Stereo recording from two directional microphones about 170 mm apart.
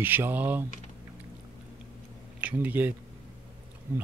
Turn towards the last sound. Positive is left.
turn(degrees=-10)  # may be behind; listen again after turning